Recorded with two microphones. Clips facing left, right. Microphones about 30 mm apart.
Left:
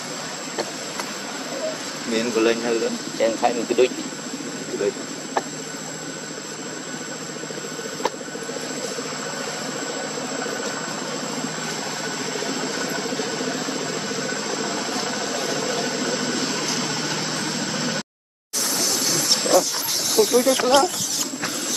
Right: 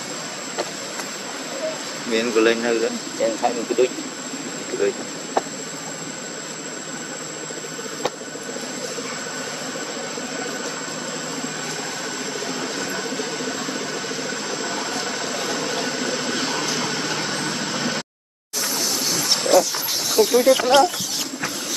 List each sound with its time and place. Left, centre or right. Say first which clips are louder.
2.0 s speech: right 2 dB; centre
3.2 s speech: left 1 dB; left
4.8 s speech: right 2 dB; right
12.4 s vehicle: even; centre
18.8 s a sound: left 1 dB; centre